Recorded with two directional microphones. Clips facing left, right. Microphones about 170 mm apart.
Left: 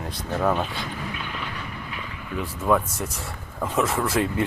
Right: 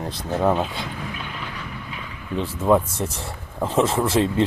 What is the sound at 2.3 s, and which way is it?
Speech, 25° right (ahead or behind).